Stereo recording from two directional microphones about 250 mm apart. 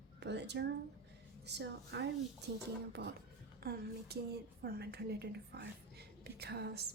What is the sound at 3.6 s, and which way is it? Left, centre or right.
A woman's voice, right.